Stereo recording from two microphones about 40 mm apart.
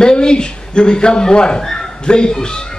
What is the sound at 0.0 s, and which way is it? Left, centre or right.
Speech, left.